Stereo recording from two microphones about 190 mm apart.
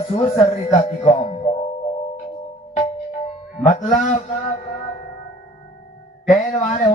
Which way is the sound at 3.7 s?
40° left (ahead or behind).